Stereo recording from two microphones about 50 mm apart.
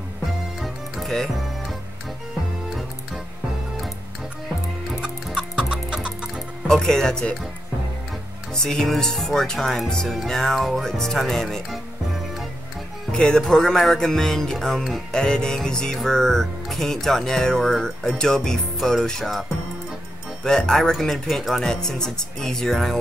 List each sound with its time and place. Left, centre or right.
0.6 s music: centre
1.1 s music: centre
5.0 s chicken: centre
6.7 s speech: centre
8.5 s speech: centre
13.1 s speech: centre
15.0 s speech: centre
20.4 s speech: centre